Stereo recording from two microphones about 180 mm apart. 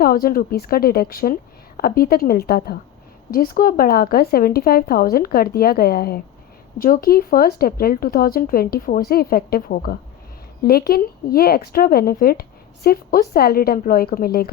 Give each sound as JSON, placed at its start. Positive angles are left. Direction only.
{"t": 0.0, "sound": "a woman's voice", "side_deg": 55}